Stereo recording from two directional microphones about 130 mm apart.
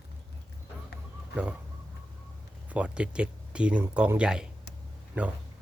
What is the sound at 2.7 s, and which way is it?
Speech, 10° right (ahead or behind).